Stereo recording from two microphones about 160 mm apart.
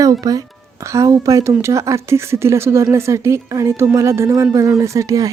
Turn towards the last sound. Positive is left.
turn(degrees=-20)  # may be behind; listen again after turning